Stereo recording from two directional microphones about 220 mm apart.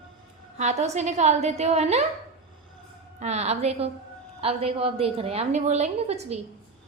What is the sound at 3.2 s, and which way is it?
A woman's voice, 30° right (ahead or behind).